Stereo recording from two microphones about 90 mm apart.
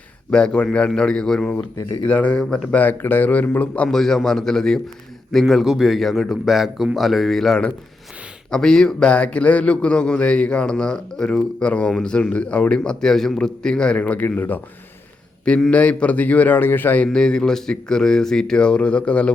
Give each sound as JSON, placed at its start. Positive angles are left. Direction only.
{"t": 0.3, "sound": "speech", "side_deg": 10}
{"t": 1.8, "sound": "speech", "side_deg": 60}
{"t": 2.0, "sound": "speech", "side_deg": 15}
{"t": 2.4, "sound": "a man's voice", "side_deg": 0}
{"t": 2.7, "sound": "speech", "side_deg": 20}
{"t": 3.8, "sound": "a man's voice", "side_deg": 5}
{"t": 17.1, "sound": "speech", "side_deg": 10}